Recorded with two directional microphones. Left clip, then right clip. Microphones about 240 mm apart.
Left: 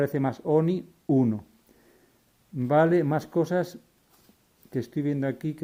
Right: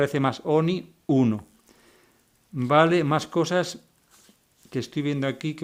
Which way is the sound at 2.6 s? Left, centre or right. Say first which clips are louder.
Right 2 dB; right.